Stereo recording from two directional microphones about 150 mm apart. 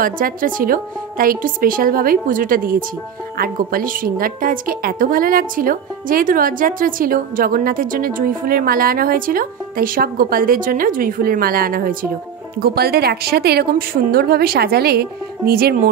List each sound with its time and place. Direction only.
0.0 s a woman's voice: 65° right (ahead or behind)
12.5 s a woman's voice: 90° right